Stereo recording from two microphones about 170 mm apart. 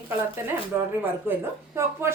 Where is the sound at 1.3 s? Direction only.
15° right (ahead or behind).